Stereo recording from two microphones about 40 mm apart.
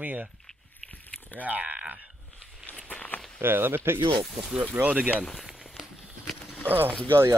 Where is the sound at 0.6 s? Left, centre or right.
Left.